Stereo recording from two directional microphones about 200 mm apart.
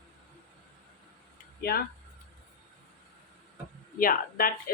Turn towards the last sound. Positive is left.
turn(degrees=45)  # may be behind; listen again after turning